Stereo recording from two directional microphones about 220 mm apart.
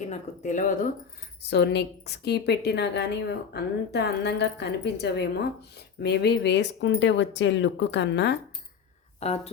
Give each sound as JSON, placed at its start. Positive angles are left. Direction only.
{"t": 0.1, "sound": "speech", "side_deg": 35}
{"t": 1.4, "sound": "a woman's voice", "side_deg": 50}
{"t": 9.2, "sound": "speech", "side_deg": 30}